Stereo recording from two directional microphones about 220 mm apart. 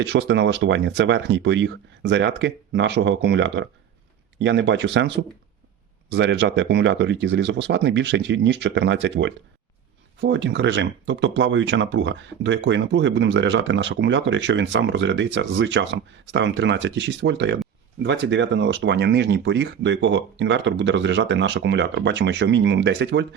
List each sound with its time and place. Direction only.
0.0 s speech: 50° right (ahead or behind)